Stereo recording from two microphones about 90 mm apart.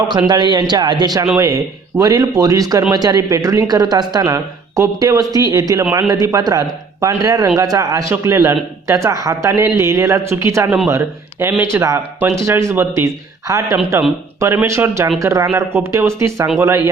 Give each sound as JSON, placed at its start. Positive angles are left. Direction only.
{"t": 0.3, "sound": "speech", "side_deg": -55}
{"t": 8.1, "sound": "speech", "side_deg": -30}
{"t": 13.9, "sound": "speech", "side_deg": -25}